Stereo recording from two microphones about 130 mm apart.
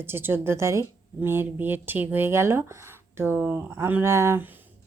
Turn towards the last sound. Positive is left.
turn(degrees=-20)  # may be behind; listen again after turning